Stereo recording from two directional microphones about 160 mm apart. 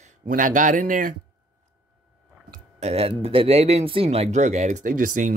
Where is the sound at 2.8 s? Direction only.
40° right (ahead or behind); by 5.3 s 55° right (ahead or behind).